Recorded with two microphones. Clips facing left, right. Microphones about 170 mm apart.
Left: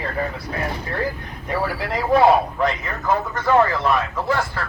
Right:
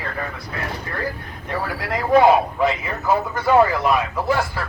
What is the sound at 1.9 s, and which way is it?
Speech, centre (ahead or behind).